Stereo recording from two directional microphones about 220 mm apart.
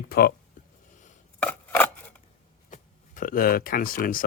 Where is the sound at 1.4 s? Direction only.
5° left (ahead or behind).